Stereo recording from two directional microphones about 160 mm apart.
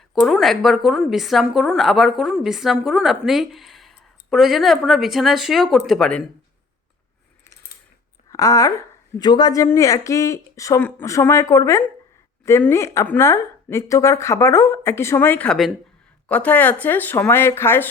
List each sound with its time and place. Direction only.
0.1 s a woman's voice: centre (ahead or behind)
8.3 s speech: 20° left (ahead or behind)